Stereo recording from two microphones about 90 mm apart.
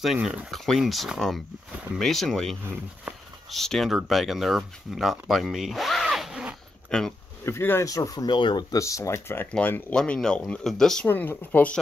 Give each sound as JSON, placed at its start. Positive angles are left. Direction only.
{"t": 0.0, "sound": "speech", "side_deg": -5}
{"t": 0.5, "sound": "speech", "side_deg": 0}
{"t": 3.5, "sound": "speech", "side_deg": 5}
{"t": 6.9, "sound": "speech", "side_deg": 5}
{"t": 7.4, "sound": "speech", "side_deg": 25}
{"t": 7.8, "sound": "speech", "side_deg": 40}
{"t": 8.4, "sound": "speech", "side_deg": 65}
{"t": 8.7, "sound": "speech", "side_deg": 35}
{"t": 11.1, "sound": "speech", "side_deg": 20}